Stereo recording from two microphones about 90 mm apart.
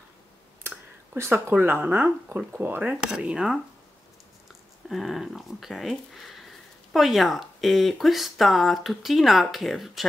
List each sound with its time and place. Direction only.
0.7 s a sound: 30° right (ahead or behind)
1.5 s speech: 25° right (ahead or behind)
3.0 s speech: 10° right (ahead or behind)